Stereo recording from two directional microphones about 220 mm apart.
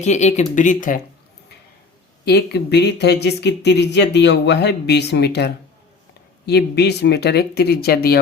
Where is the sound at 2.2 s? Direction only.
50° left (ahead or behind).